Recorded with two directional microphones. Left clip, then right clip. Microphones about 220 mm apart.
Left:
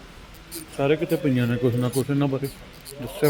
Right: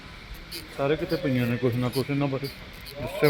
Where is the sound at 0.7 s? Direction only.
30° left (ahead or behind).